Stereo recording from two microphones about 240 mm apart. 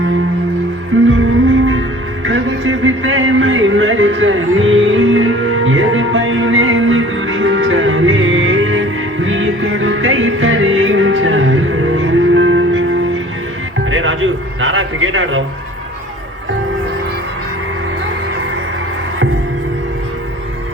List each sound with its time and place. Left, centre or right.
0.9 s music: right
2.2 s music: right
13.9 s music: right